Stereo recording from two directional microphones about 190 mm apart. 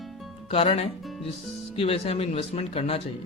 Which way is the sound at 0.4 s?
30° left (ahead or behind).